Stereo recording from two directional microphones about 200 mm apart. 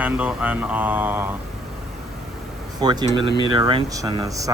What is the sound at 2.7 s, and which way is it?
Speech, 20° right (ahead or behind).